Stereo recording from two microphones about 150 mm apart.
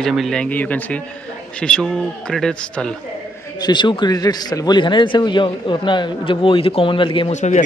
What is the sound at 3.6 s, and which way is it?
A man's voice, 30° left (ahead or behind).